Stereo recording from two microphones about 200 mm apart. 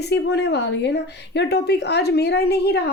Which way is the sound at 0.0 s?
55° left (ahead or behind).